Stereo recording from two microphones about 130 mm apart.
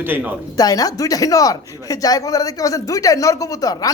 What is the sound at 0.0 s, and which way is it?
Speech, 15° right (ahead or behind).